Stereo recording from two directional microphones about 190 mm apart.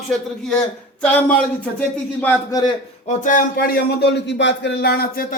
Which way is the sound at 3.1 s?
45° left (ahead or behind).